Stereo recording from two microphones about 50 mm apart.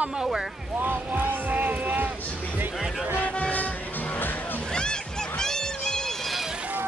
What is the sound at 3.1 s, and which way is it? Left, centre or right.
Toot, left.